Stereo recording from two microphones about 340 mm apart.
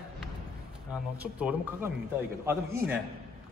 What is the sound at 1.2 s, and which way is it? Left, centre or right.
Speech, centre.